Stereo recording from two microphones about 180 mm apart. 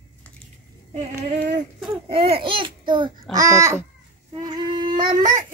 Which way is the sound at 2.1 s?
30° right (ahead or behind).